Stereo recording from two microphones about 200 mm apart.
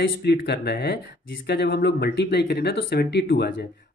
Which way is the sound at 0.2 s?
55° left (ahead or behind).